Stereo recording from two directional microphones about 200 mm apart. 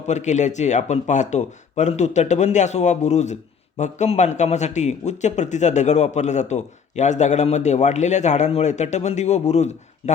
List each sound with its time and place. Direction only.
0.1 s speech: 35° left (ahead or behind)